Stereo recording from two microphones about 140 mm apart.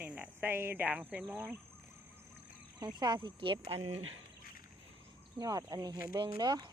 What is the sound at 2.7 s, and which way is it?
Speech, 30° right (ahead or behind).